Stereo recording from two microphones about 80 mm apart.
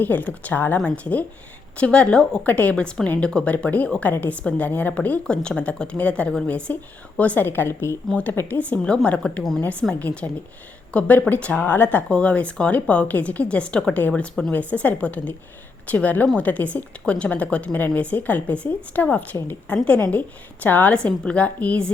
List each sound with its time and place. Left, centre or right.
0.0 s a woman's voice: left
0.8 s a woman's voice: centre
14.1 s speech: centre
14.5 s a woman's voice: centre